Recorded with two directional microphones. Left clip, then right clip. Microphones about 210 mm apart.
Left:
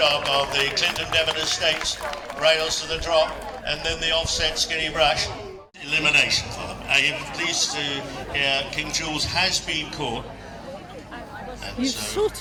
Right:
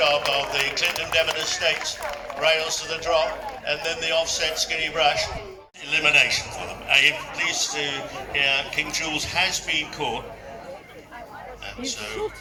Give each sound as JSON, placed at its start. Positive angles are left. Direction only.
{"t": 0.3, "sound": "speech", "side_deg": 15}
{"t": 5.9, "sound": "a man's voice", "side_deg": 0}
{"t": 11.8, "sound": "a man's voice", "side_deg": 0}